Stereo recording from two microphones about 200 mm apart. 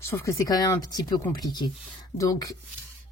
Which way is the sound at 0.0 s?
15° left (ahead or behind).